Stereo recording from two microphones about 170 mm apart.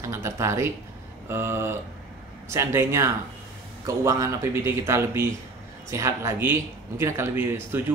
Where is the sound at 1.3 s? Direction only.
15° right (ahead or behind).